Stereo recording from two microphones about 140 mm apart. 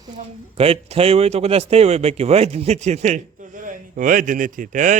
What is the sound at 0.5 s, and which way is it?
Speech, 45° right (ahead or behind).